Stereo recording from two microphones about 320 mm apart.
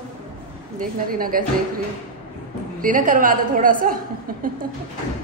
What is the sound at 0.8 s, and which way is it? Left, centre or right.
Speech, right.